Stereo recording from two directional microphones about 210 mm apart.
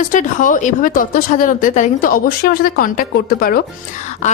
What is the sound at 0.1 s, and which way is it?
Speech, 40° left (ahead or behind).